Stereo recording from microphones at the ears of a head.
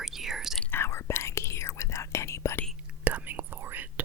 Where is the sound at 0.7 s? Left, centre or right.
Left.